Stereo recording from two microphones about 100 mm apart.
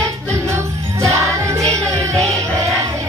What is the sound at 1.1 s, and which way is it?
Music, 30° right (ahead or behind).